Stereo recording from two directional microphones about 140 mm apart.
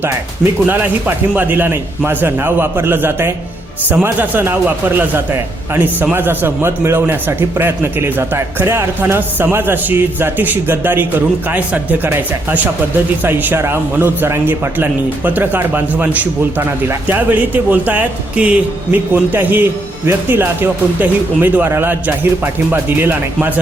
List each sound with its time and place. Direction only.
0.0 s a man's voice: 15° right (ahead or behind)